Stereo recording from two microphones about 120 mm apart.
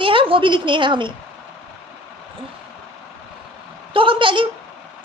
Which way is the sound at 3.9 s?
45° right (ahead or behind).